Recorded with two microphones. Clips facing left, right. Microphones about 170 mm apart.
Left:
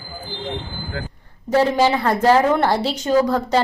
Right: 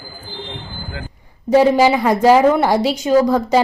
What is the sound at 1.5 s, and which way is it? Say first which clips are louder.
A woman's voice: right 4 dB; 10° right (ahead or behind).